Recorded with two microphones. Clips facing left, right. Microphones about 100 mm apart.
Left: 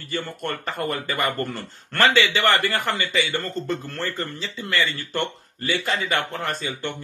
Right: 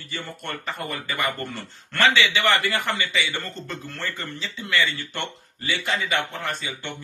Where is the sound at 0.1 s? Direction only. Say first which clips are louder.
Left 5 dB; 50° left (ahead or behind).